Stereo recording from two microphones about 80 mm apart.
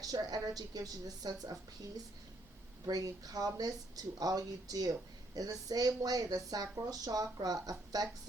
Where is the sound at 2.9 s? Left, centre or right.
Right.